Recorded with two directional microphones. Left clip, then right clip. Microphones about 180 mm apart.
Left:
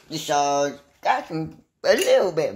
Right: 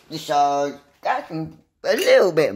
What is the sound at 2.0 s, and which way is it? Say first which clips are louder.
Speech: right 4 dB; 20° right (ahead or behind).